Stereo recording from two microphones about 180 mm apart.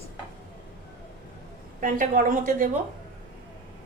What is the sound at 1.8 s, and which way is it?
Speech, 50° right (ahead or behind).